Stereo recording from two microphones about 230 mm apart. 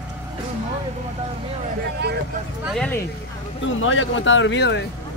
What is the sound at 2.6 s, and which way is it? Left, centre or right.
Speech, centre.